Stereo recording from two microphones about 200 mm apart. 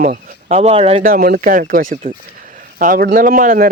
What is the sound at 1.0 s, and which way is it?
Speech, 45° right (ahead or behind).